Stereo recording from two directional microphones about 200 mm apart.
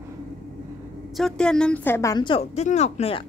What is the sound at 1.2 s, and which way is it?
A woman's voice, 5° left (ahead or behind).